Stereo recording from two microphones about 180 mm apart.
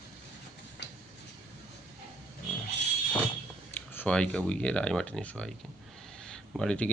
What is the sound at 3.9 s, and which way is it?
Speech, 10° left (ahead or behind).